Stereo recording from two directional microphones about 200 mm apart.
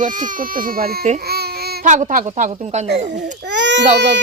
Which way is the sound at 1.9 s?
40° right (ahead or behind).